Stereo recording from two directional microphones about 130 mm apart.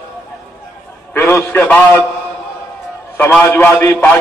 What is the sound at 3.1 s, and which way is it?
Speech, 15° left (ahead or behind).